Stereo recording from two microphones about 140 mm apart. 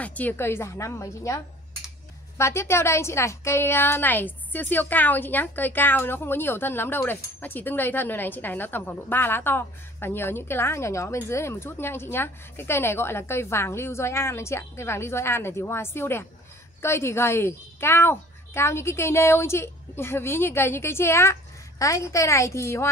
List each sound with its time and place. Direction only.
0.0 s a woman's voice: 10° left (ahead or behind)